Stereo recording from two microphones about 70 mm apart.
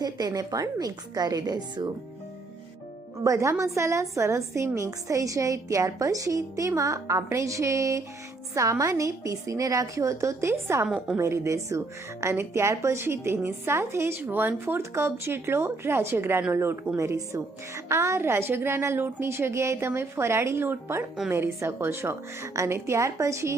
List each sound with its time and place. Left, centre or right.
0.0 s a woman's voice: right
3.2 s a woman's voice: right
10.8 s a woman's voice: centre
11.2 s a woman's voice: right
14.2 s a woman's voice: right